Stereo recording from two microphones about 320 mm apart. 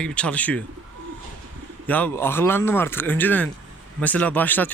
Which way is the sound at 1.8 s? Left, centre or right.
Centre.